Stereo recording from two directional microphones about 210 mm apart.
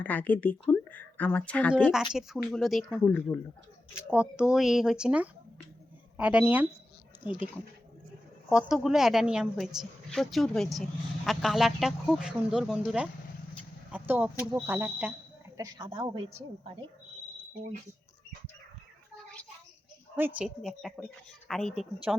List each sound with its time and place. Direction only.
0.0 s a woman's voice: 10° left (ahead or behind)
8.4 s a woman's voice: 5° right (ahead or behind)
15.5 s a woman's voice: 20° right (ahead or behind)
20.1 s a woman's voice: 10° right (ahead or behind)